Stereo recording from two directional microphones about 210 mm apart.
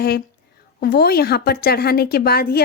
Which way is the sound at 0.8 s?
45° left (ahead or behind).